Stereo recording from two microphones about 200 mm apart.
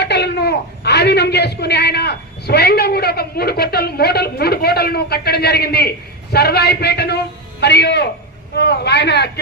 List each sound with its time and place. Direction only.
0.0 s a man's voice: 55° left (ahead or behind)